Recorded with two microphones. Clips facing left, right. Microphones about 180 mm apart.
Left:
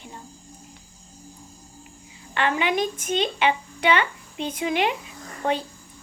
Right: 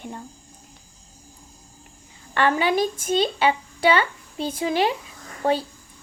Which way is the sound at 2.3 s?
40° right (ahead or behind).